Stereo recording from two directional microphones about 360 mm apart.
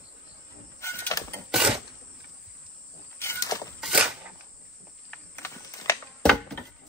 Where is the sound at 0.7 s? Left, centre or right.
Centre.